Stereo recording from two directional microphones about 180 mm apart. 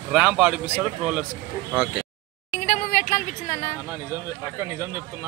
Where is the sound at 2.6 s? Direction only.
45° left (ahead or behind).